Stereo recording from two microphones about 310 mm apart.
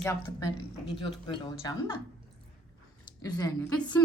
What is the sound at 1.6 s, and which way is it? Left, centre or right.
Speech, centre.